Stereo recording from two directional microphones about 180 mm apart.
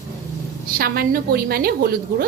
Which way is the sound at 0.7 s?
55° right (ahead or behind).